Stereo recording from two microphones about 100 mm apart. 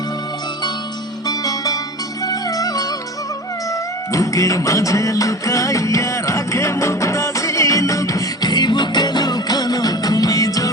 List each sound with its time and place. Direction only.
1.3 s music: 40° left (ahead or behind)
4.1 s music: 35° left (ahead or behind)